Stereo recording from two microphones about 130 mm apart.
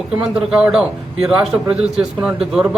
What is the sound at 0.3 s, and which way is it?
A man's voice, 5° right (ahead or behind).